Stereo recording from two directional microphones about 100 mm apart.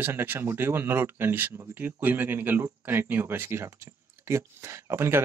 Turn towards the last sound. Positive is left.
turn(degrees=-25)  # may be behind; listen again after turning